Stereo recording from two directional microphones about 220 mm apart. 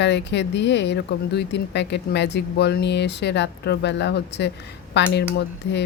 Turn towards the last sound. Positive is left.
turn(degrees=50)  # may be behind; listen again after turning